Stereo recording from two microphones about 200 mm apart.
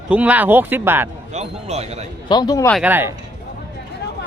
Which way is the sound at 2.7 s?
5° right (ahead or behind).